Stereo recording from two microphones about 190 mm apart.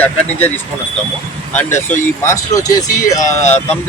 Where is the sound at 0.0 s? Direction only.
10° left (ahead or behind).